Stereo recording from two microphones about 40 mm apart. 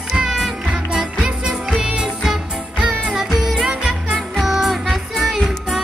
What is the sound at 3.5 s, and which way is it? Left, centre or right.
Music, right.